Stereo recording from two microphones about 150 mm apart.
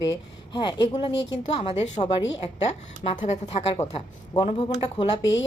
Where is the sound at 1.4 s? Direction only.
40° left (ahead or behind).